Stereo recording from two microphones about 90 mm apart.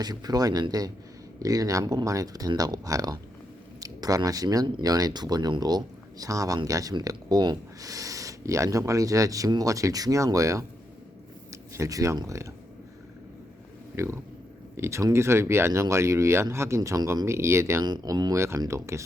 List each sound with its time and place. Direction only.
0.0 s speech: 45° right (ahead or behind)
13.9 s speech: 30° right (ahead or behind)
17.8 s speech: 50° right (ahead or behind); by 19.0 s 35° right (ahead or behind)